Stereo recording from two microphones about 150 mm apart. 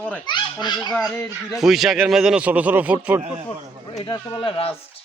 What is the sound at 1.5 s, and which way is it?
Speech, centre (ahead or behind).